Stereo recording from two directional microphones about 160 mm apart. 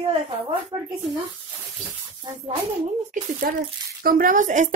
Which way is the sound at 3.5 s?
60° right (ahead or behind).